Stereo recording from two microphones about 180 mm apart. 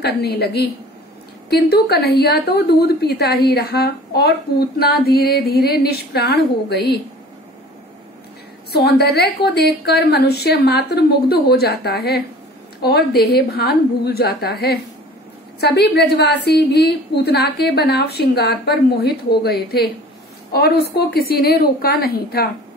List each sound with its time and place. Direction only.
0.0 s a woman's voice: 65° left (ahead or behind)
8.7 s a woman's voice: 60° left (ahead or behind)
20.5 s a woman's voice: 60° left (ahead or behind)